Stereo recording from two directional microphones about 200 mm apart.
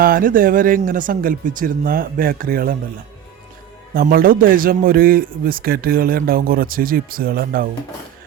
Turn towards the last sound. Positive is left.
turn(degrees=-45)  # may be behind; listen again after turning